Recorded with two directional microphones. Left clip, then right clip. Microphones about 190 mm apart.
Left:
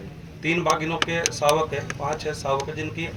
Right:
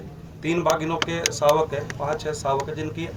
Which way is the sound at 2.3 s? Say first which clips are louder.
Right 1 dB; 20° right (ahead or behind).